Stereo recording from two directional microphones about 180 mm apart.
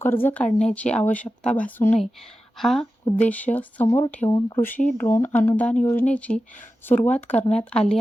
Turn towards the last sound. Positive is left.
turn(degrees=5)  # may be behind; listen again after turning